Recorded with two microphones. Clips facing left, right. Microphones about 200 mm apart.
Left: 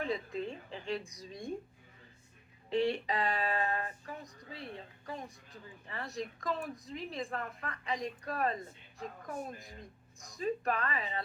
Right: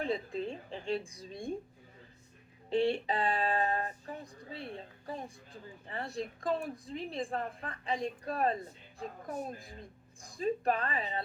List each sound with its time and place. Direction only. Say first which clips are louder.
0.0 s a woman's voice: right 2 dB; 30° right (ahead or behind)
2.6 s a sound: right 2 dB; 30° right (ahead or behind)
9.0 s a woman's voice: right 2 dB; 35° right (ahead or behind)